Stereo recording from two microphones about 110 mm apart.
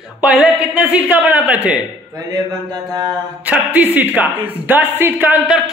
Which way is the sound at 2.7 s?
40° right (ahead or behind).